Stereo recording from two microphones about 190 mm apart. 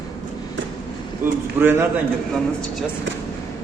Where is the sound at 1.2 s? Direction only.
10° right (ahead or behind).